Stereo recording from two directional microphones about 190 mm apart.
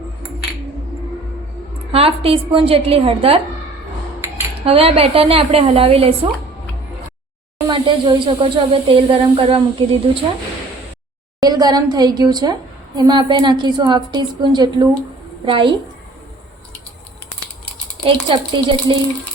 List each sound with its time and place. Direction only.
1.9 s a woman's voice: 30° right (ahead or behind)
4.6 s a woman's voice: 30° right (ahead or behind)
7.7 s speech: 25° right (ahead or behind)
11.3 s speech: 20° right (ahead or behind)
18.0 s speech: 25° right (ahead or behind)